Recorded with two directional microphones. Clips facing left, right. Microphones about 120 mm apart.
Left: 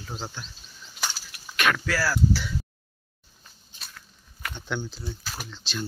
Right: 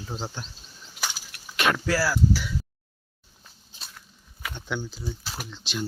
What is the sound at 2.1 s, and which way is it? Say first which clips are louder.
Speech: even; 10° right (ahead or behind).